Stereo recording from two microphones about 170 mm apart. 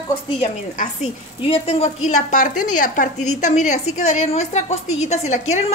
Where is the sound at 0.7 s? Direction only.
35° left (ahead or behind).